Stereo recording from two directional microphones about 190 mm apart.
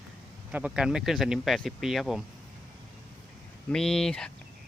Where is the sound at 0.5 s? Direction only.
5° right (ahead or behind).